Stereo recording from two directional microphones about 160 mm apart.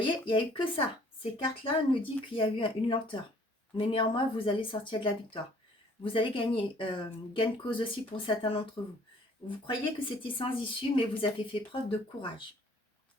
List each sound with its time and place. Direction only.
0.0 s a woman's voice: 30° left (ahead or behind)
9.6 s a woman's voice: 30° left (ahead or behind)